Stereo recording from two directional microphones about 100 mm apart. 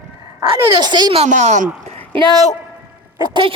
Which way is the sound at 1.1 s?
90° right.